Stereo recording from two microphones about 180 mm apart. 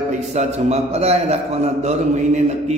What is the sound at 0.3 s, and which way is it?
A man's voice, 35° right (ahead or behind).